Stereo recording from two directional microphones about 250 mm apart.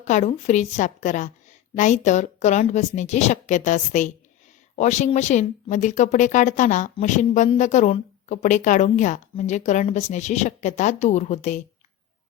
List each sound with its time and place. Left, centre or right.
0.0 s speech: left